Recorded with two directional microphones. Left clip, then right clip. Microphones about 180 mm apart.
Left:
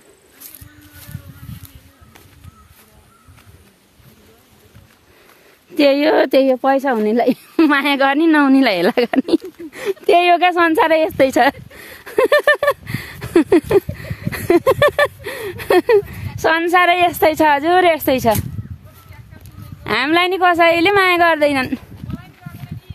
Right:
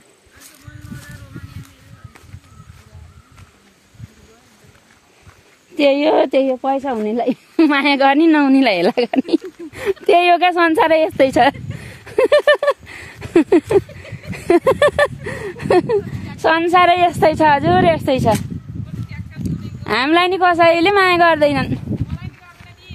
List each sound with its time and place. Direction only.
5.8 s speech: 30° left (ahead or behind)
7.5 s a woman's voice: 10° left (ahead or behind)
9.7 s speech: centre (ahead or behind)
14.1 s a sound: 15° left (ahead or behind)
14.5 s speech: centre (ahead or behind)
19.8 s speech: centre (ahead or behind)